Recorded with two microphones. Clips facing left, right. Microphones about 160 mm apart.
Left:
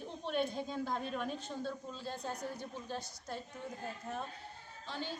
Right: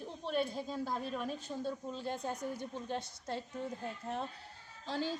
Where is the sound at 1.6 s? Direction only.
20° right (ahead or behind).